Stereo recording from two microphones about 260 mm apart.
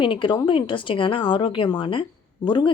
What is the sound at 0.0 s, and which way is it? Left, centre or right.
A woman's voice, centre.